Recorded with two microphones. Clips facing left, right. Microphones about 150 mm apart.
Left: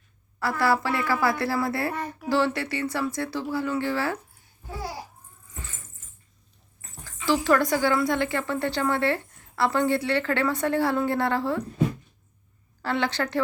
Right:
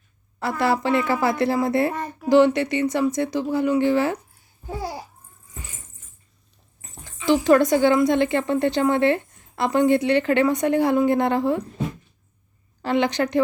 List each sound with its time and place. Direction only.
0.3 s speech: 20° right (ahead or behind)
1.9 s speech: centre (ahead or behind)
2.3 s speech: 20° right (ahead or behind)
6.8 s speech: 20° right (ahead or behind)
12.8 s speech: 15° right (ahead or behind)